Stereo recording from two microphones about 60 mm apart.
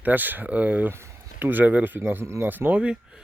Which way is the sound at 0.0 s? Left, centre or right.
Right.